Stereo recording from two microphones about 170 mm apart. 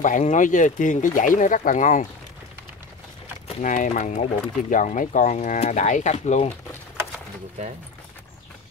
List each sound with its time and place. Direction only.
0.0 s speech: 45° left (ahead or behind)
3.6 s speech: 50° left (ahead or behind)